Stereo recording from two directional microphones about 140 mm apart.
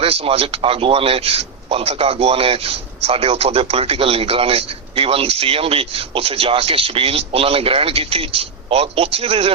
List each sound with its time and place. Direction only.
0.0 s speech: 45° right (ahead or behind)